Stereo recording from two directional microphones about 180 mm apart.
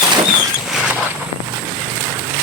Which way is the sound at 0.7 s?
Centre (ahead or behind).